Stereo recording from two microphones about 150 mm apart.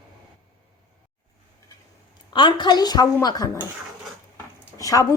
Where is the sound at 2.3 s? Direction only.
30° left (ahead or behind).